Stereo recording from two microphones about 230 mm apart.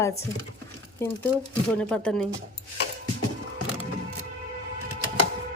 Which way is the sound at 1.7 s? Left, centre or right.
Centre.